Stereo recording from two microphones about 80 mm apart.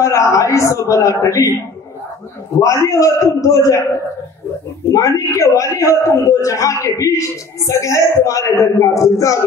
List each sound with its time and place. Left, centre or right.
0.0 s a man's voice: left
2.6 s a man's voice: left
4.9 s a man's voice: left